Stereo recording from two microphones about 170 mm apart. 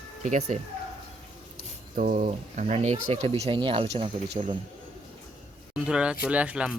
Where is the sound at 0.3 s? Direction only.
45° right (ahead or behind).